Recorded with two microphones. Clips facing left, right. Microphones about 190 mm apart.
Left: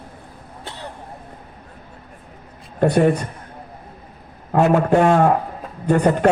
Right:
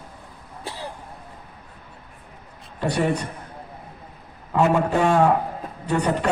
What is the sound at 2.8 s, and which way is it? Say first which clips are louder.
Speech: left 7 dB; 50° left (ahead or behind).